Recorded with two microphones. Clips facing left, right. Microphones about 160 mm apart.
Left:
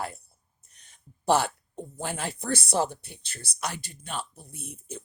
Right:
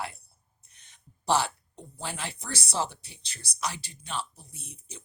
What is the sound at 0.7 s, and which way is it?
Speech, 45° left (ahead or behind).